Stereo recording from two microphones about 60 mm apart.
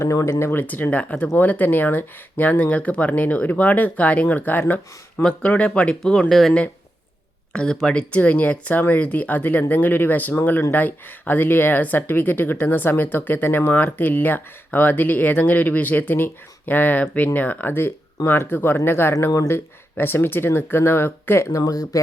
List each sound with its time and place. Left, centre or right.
0.0 s speech: left
0.7 s speech: left
5.1 s speech: centre
5.5 s speech: left
6.0 s speech: centre
7.5 s speech: centre; by 21.4 s left
21.5 s speech: left